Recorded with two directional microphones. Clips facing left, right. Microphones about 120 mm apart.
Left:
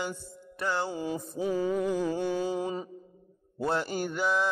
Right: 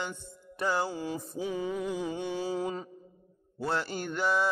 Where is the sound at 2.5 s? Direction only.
20° left (ahead or behind).